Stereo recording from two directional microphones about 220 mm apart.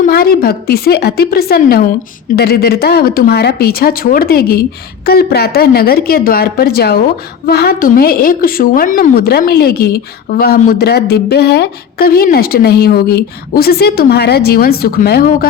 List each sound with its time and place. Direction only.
0.0 s a woman's voice: 40° left (ahead or behind)